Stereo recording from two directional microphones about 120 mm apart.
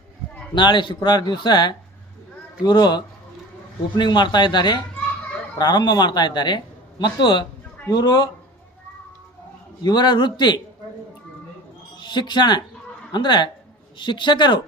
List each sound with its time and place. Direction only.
0.5 s speech: 40° left (ahead or behind)
9.8 s speech: 35° left (ahead or behind)
11.9 s speech: 40° left (ahead or behind)